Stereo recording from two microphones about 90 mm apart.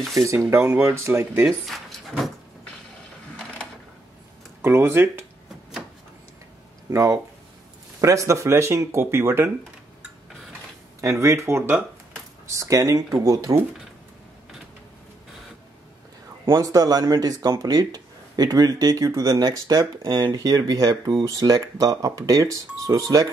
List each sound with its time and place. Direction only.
0.1 s speech: 35° right (ahead or behind)
1.7 s drawer open or close: centre (ahead or behind)
4.6 s speech: 25° right (ahead or behind)
6.9 s speech: 35° right (ahead or behind)
11.0 s speech: 35° right (ahead or behind)
16.4 s speech: 40° right (ahead or behind)